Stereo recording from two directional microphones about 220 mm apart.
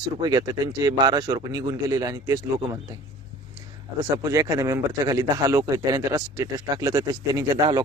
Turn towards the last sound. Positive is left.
turn(degrees=-20)  # may be behind; listen again after turning